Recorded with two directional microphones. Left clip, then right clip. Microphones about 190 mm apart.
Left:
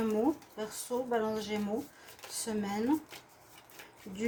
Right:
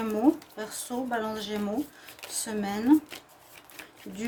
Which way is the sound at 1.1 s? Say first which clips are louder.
Right 2 dB; 55° right (ahead or behind).